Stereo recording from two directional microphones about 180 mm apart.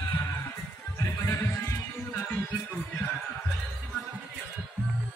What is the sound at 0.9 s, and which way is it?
Music, 15° left (ahead or behind).